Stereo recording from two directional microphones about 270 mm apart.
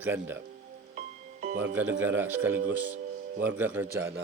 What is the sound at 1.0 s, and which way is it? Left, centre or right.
Music, right.